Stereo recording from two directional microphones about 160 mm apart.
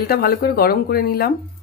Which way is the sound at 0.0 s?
70° left (ahead or behind).